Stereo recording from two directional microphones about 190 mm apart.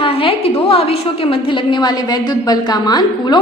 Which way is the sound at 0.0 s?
30° left (ahead or behind).